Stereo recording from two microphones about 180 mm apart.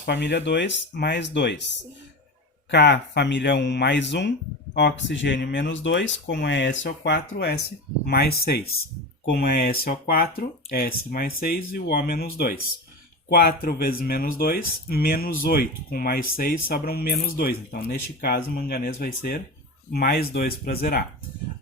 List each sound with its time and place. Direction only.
0.0 s speech: 70° left (ahead or behind)
2.6 s speech: 70° left (ahead or behind); by 6.7 s 90° left
6.8 s speech: 65° left (ahead or behind)